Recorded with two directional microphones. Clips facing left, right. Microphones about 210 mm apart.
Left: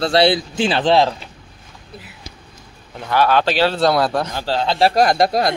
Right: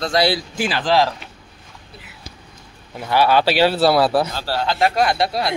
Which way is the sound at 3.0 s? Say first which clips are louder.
Even; 10° right (ahead or behind).